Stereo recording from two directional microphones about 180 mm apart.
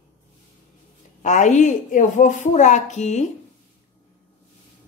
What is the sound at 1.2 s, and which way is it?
A woman's voice, 40° left (ahead or behind).